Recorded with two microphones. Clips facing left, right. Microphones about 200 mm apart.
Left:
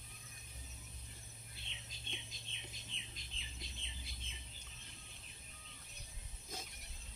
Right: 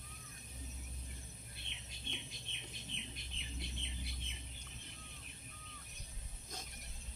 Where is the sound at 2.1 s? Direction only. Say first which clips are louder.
Right 2 dB; 60° right (ahead or behind).